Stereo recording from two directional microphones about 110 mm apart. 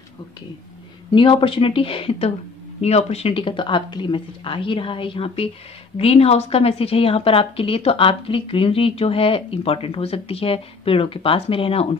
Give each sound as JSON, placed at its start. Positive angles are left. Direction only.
{"t": 1.1, "sound": "a woman's voice", "side_deg": 50}
{"t": 2.8, "sound": "a woman's voice", "side_deg": 75}